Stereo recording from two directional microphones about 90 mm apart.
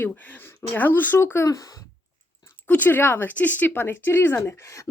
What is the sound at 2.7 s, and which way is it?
Speech, 20° left (ahead or behind).